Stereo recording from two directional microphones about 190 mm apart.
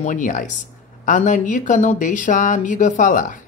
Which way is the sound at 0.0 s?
40° left (ahead or behind).